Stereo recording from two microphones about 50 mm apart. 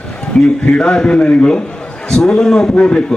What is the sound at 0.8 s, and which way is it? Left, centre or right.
A man's voice, centre.